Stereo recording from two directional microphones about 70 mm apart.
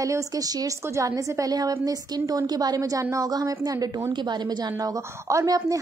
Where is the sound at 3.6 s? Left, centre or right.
Right.